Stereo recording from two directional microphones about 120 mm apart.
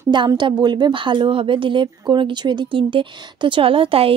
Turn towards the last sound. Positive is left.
turn(degrees=-50)  # may be behind; listen again after turning